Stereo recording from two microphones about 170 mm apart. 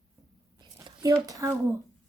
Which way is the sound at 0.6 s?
25° right (ahead or behind).